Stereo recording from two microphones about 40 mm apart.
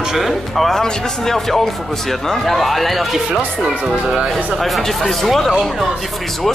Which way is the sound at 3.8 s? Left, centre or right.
Centre.